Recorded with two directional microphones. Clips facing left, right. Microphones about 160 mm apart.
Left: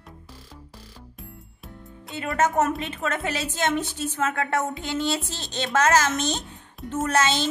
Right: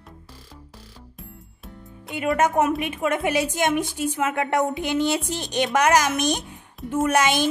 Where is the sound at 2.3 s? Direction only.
10° right (ahead or behind).